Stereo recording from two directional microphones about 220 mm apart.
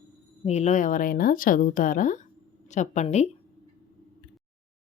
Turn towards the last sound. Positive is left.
turn(degrees=30)  # may be behind; listen again after turning